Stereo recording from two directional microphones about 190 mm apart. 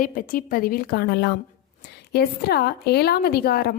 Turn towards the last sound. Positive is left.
turn(degrees=55)  # may be behind; listen again after turning